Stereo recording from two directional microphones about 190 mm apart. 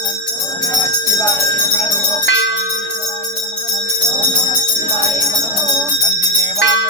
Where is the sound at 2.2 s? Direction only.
75° left (ahead or behind).